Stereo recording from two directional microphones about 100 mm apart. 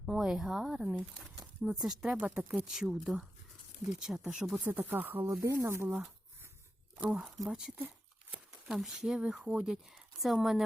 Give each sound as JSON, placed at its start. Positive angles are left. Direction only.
{"t": 0.0, "sound": "speech", "side_deg": 0}
{"t": 2.1, "sound": "speech", "side_deg": -15}
{"t": 2.5, "sound": "speech", "side_deg": -5}
{"t": 4.6, "sound": "speech", "side_deg": -20}
{"t": 7.3, "sound": "speech", "side_deg": 0}
{"t": 7.8, "sound": "tearing", "side_deg": -15}
{"t": 8.6, "sound": "speech", "side_deg": -5}